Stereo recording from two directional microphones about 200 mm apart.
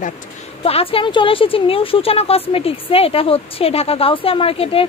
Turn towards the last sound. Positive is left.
turn(degrees=30)  # may be behind; listen again after turning